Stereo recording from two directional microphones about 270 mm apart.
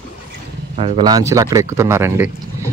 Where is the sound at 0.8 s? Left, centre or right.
Centre.